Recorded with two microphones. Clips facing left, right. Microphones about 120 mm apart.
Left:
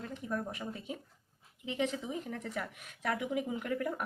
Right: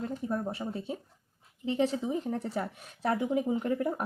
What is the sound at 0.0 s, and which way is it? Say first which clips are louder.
A woman's voice: right 5 dB; 30° right (ahead or behind).